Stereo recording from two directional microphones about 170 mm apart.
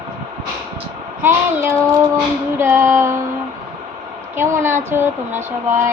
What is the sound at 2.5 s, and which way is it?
Female singing, 15° right (ahead or behind).